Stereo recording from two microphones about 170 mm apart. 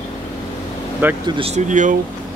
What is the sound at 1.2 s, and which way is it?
Speech, 30° right (ahead or behind).